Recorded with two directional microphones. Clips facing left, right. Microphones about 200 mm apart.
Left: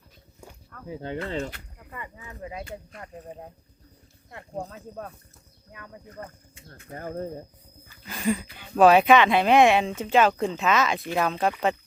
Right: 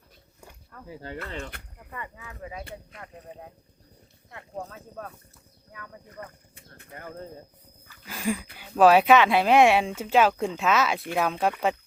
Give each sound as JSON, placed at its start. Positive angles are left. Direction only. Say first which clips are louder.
{"t": 1.0, "sound": "speech", "louder": "left 6 dB", "side_deg": 25}
{"t": 2.0, "sound": "speech", "louder": "left 1 dB", "side_deg": 15}
{"t": 4.3, "sound": "speech", "louder": "left 2 dB", "side_deg": 30}
{"t": 8.0, "sound": "speech", "louder": "left 3 dB", "side_deg": -5}